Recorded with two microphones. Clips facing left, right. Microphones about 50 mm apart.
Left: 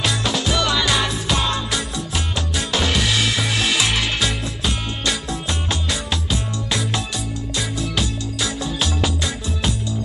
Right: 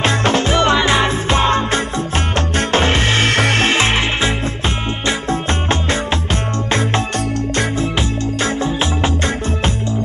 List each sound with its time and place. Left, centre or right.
0.0 s music: right